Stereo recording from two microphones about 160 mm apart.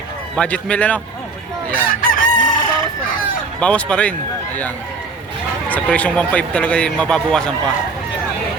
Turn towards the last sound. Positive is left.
turn(degrees=5)  # may be behind; listen again after turning